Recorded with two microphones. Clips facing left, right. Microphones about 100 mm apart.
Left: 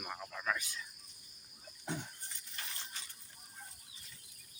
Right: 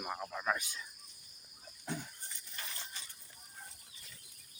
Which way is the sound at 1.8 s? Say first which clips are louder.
Even; 20° left (ahead or behind).